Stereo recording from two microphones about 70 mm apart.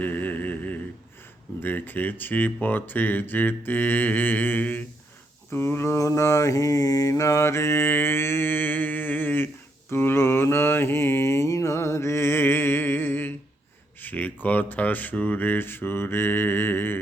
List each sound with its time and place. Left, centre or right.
0.0 s a sound: left
1.6 s speech: left
5.5 s mantra: left
14.0 s speech: left